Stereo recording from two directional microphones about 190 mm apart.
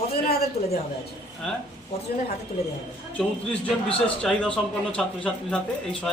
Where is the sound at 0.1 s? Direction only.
55° left (ahead or behind).